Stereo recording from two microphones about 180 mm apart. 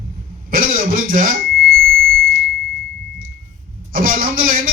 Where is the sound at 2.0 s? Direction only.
55° right (ahead or behind).